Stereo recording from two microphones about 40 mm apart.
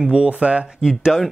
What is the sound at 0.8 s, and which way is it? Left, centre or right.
Speech, centre.